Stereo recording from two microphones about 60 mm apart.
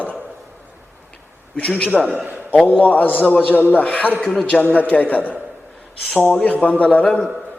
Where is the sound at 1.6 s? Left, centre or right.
Left.